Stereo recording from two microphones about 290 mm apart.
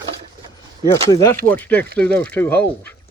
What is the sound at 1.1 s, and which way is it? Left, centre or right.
Speech, centre.